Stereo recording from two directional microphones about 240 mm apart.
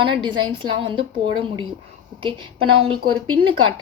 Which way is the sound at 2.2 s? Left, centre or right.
Right.